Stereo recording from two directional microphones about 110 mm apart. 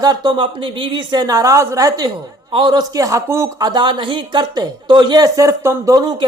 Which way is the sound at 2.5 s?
45° right (ahead or behind).